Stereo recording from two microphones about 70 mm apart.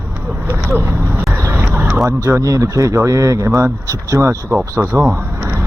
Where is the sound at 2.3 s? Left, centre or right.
Right.